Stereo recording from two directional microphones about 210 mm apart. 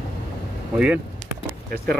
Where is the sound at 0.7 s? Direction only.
5° right (ahead or behind).